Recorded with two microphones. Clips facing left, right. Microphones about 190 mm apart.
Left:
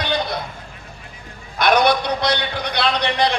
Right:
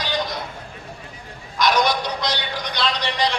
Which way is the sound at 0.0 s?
60° left (ahead or behind).